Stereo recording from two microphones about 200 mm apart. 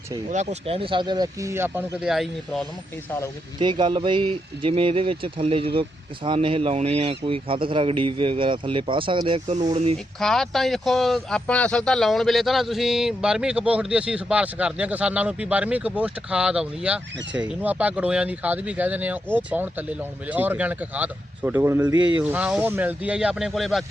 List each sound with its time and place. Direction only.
0.3 s speech: 30° right (ahead or behind); by 2.6 s centre (ahead or behind)
3.6 s speech: 25° right (ahead or behind)
10.2 s speech: centre (ahead or behind)